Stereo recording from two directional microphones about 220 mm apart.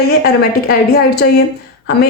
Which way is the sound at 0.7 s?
45° left (ahead or behind).